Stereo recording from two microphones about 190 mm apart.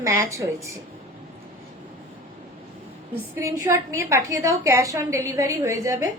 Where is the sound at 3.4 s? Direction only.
15° right (ahead or behind).